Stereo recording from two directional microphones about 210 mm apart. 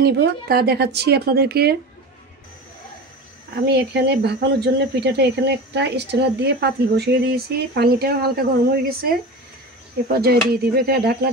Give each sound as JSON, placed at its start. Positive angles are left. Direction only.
{"t": 0.0, "sound": "speech", "side_deg": -45}
{"t": 3.5, "sound": "speech", "side_deg": -50}
{"t": 10.1, "sound": "speech", "side_deg": -45}